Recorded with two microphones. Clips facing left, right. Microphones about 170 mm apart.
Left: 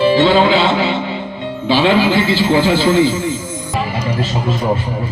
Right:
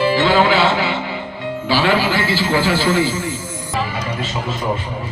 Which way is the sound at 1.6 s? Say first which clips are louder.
Left 4 dB; 20° left (ahead or behind).